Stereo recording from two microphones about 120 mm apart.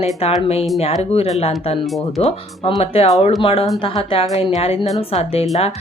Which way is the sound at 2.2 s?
55° left (ahead or behind).